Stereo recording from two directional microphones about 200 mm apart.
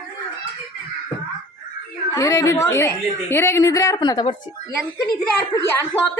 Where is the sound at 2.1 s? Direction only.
15° left (ahead or behind).